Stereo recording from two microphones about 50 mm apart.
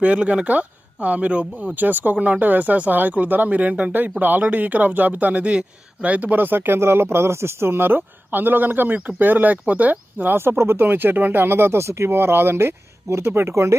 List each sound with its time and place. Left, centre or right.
0.0 s speech: right
10.3 s speech: right